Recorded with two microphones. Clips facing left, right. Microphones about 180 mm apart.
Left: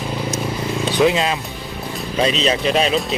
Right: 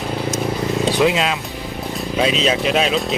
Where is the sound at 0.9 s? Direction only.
Centre (ahead or behind).